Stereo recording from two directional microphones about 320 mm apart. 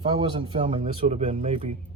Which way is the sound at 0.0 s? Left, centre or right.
Centre.